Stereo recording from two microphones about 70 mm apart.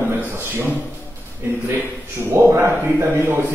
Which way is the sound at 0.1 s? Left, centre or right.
Right.